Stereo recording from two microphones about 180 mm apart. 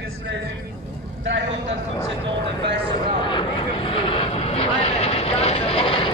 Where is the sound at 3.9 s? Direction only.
30° left (ahead or behind).